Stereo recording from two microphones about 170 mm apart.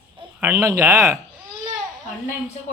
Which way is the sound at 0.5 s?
20° right (ahead or behind).